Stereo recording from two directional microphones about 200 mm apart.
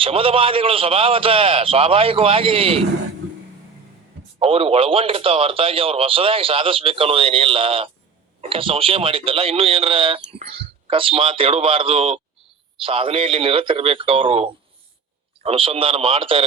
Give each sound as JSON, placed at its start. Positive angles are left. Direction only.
{"t": 0.0, "sound": "speech", "side_deg": -25}
{"t": 4.4, "sound": "speech", "side_deg": -30}